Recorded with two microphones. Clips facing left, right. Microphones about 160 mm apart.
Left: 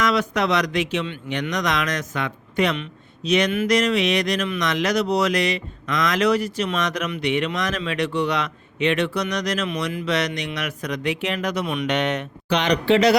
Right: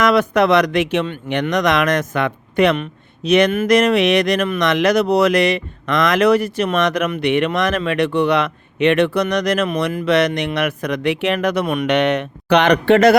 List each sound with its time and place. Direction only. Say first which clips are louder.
0.0 s speech: right 7 dB; 55° right (ahead or behind)